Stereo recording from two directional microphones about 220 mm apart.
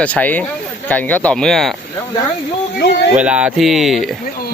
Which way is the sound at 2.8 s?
50° left (ahead or behind).